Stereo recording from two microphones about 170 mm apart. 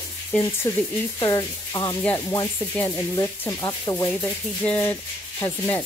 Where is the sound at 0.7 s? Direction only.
15° left (ahead or behind).